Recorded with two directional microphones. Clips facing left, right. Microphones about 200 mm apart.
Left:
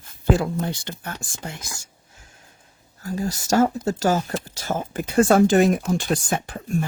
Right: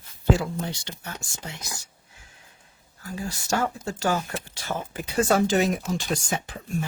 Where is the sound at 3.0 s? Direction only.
40° left (ahead or behind).